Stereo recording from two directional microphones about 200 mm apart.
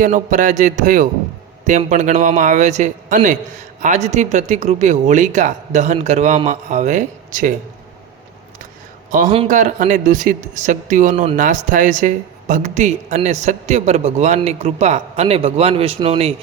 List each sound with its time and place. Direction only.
0.0 s speech: 40° right (ahead or behind)
9.0 s a man's voice: 40° right (ahead or behind)